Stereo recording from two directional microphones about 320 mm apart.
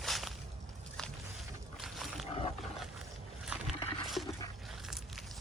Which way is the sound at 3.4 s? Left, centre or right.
Centre.